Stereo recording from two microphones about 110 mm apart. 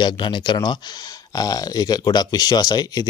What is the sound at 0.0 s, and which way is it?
A man's voice, 45° left (ahead or behind).